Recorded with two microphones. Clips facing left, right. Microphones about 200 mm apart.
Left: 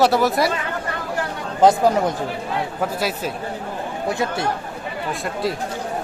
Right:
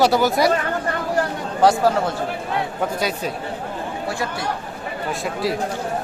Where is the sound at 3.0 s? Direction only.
5° left (ahead or behind).